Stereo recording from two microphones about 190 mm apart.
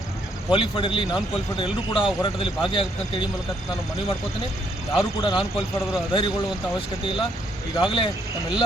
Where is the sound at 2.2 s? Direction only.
25° left (ahead or behind).